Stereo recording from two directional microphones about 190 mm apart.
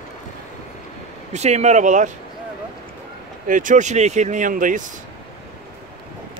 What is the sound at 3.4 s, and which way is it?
Speech, 45° right (ahead or behind).